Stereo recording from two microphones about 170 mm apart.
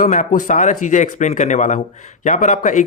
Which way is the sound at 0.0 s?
45° left (ahead or behind).